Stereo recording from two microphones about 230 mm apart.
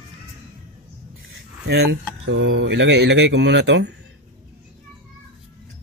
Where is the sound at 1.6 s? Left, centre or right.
Right.